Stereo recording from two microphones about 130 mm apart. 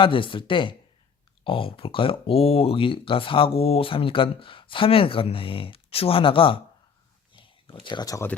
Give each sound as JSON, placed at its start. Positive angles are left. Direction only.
{"t": 0.0, "sound": "speech", "side_deg": 40}
{"t": 7.3, "sound": "a sound", "side_deg": 40}
{"t": 7.9, "sound": "speech", "side_deg": 30}